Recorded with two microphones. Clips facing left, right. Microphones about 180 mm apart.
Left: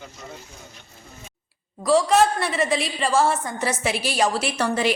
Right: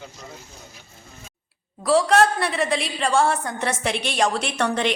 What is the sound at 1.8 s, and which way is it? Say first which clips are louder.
A woman's voice: even; centre (ahead or behind).